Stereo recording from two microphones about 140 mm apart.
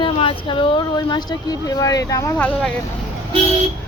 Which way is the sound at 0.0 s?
35° left (ahead or behind).